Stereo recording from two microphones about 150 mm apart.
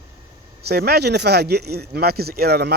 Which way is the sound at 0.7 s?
90° right.